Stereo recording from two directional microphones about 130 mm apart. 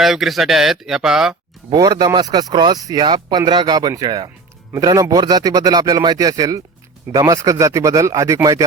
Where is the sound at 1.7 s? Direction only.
30° right (ahead or behind).